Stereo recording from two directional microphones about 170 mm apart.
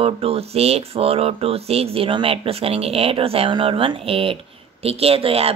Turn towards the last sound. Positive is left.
turn(degrees=-35)  # may be behind; listen again after turning